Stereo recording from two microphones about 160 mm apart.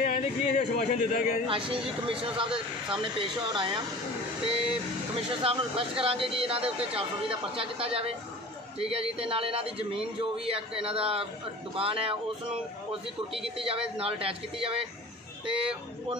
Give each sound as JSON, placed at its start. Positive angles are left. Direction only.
{"t": 0.0, "sound": "speech", "side_deg": 50}
{"t": 0.7, "sound": "a man's voice", "side_deg": 70}
{"t": 1.7, "sound": "speech", "side_deg": -35}
{"t": 13.6, "sound": "speech", "side_deg": -35}